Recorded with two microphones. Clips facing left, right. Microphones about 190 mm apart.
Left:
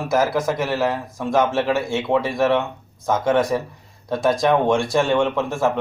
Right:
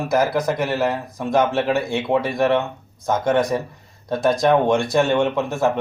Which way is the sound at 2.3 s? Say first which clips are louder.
Even; centre (ahead or behind).